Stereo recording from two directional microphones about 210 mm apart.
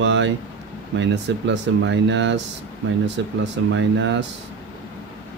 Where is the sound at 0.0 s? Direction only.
60° right (ahead or behind).